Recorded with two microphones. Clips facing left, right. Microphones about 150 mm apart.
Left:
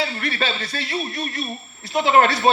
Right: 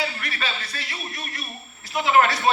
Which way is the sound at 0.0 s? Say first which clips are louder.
Left 5 dB; 25° left (ahead or behind).